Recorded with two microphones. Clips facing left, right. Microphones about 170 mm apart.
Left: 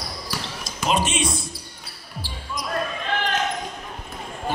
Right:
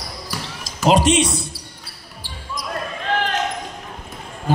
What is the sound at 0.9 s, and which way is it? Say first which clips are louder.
Speech: right 8 dB; 90° right.